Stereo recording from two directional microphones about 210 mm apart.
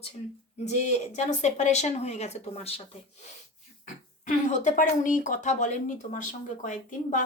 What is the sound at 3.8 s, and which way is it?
Speech, 35° left (ahead or behind).